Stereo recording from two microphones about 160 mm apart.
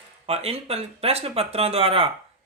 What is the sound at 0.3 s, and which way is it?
Speech, 40° right (ahead or behind).